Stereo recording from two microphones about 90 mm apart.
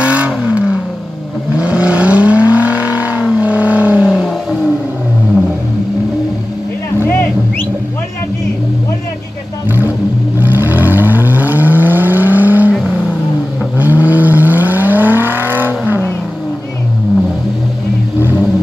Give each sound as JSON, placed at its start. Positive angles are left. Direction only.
{"t": 0.0, "sound": "vehicle", "side_deg": -15}
{"t": 4.1, "sound": "vehicle", "side_deg": 0}
{"t": 10.4, "sound": "vehicle", "side_deg": -20}
{"t": 13.7, "sound": "vehicle", "side_deg": -20}